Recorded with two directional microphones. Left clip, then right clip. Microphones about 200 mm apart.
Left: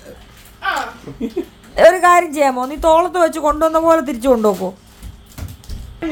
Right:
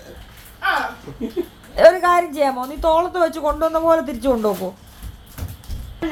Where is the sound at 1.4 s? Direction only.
55° left (ahead or behind).